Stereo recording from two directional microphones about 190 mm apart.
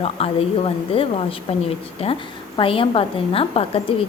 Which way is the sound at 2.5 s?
30° left (ahead or behind).